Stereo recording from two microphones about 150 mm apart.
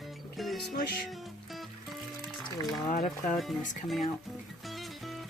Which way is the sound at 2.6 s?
25° left (ahead or behind).